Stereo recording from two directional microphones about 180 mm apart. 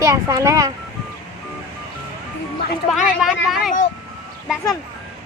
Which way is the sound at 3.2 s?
Centre (ahead or behind).